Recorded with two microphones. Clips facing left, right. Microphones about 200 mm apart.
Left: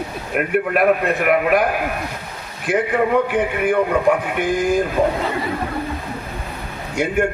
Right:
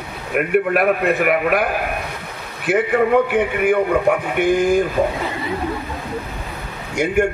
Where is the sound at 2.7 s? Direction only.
5° right (ahead or behind).